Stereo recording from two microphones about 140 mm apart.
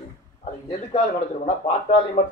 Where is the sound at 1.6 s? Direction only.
50° left (ahead or behind).